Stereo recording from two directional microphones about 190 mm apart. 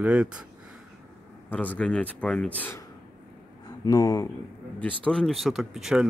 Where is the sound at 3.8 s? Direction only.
20° left (ahead or behind).